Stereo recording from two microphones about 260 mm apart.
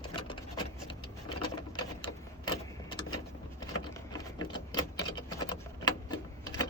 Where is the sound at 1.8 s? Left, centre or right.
Centre.